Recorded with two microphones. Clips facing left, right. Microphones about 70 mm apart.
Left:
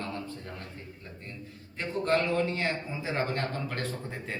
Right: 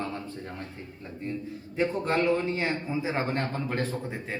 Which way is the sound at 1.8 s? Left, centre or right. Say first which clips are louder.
Right 2 dB; centre.